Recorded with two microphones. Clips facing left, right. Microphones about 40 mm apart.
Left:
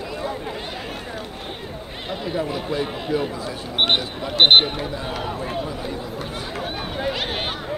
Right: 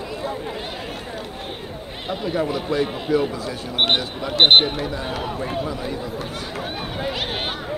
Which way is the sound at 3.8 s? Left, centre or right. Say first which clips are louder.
Even; centre.